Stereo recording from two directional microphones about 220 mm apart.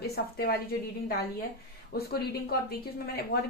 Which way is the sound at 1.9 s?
45° left (ahead or behind).